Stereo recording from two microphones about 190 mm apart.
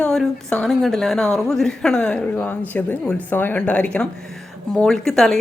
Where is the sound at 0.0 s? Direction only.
5° left (ahead or behind).